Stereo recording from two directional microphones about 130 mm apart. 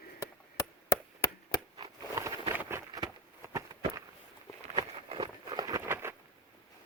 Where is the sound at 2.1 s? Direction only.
20° right (ahead or behind).